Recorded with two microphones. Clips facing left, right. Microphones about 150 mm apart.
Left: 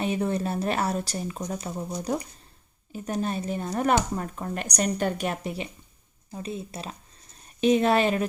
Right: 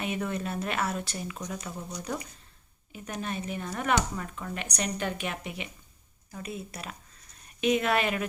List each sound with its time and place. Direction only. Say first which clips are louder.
0.0 s speech: left 5 dB; 30° left (ahead or behind)
6.3 s speech: left 4 dB; 25° left (ahead or behind)